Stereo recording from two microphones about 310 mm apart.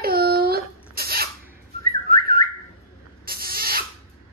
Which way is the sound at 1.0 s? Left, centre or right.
Right.